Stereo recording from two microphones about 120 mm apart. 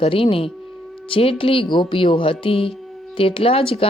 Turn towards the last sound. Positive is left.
turn(degrees=50)  # may be behind; listen again after turning